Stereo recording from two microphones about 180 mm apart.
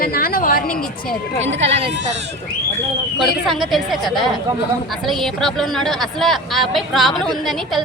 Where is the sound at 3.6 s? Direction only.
Centre (ahead or behind).